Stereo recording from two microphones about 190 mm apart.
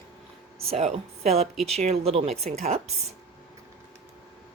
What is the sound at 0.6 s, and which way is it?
Speech, 35° right (ahead or behind).